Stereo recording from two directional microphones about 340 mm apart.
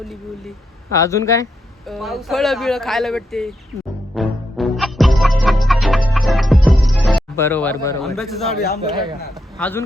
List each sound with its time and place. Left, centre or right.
0.0 s speech: centre
4.1 s music: centre
8.5 s a man's voice: left
9.6 s speech: centre